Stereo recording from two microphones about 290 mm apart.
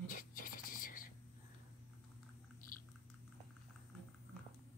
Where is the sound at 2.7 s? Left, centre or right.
Left.